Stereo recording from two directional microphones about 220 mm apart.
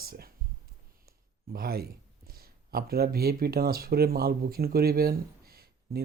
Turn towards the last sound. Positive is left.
turn(degrees=-45)  # may be behind; listen again after turning